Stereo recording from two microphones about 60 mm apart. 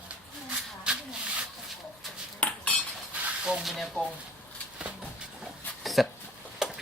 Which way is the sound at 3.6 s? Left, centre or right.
Centre.